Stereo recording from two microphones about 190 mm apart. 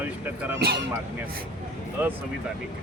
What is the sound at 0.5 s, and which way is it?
Speech, 55° right (ahead or behind).